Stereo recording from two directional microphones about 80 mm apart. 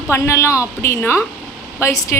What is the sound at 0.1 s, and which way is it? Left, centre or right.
A woman's voice, left.